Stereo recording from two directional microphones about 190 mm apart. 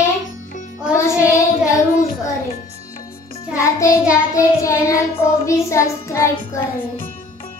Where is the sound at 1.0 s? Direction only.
15° left (ahead or behind).